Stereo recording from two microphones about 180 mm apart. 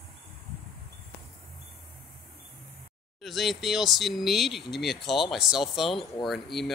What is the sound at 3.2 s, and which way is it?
Speech, centre (ahead or behind).